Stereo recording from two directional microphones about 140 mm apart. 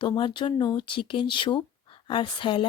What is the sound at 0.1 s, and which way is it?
Speech, 35° left (ahead or behind).